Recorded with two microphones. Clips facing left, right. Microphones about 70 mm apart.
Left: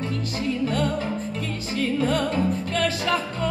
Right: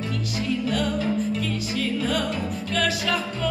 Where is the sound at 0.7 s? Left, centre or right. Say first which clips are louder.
Even; left.